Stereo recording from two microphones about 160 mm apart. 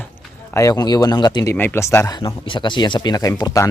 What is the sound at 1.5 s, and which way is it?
Speech, 15° left (ahead or behind).